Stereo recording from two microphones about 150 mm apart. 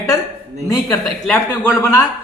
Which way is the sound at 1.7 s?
15° left (ahead or behind).